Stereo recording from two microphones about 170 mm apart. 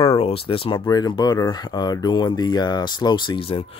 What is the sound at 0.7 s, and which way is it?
A man's voice, 20° left (ahead or behind).